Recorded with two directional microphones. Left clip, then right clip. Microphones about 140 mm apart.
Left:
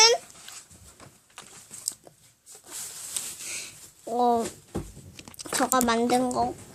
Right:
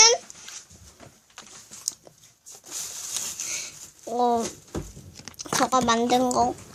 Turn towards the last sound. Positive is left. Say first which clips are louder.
# right 4 dB
turn(degrees=-20)  # may be behind; listen again after turning